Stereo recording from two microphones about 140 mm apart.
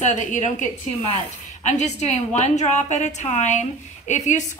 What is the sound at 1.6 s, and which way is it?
A woman's voice, 55° left (ahead or behind).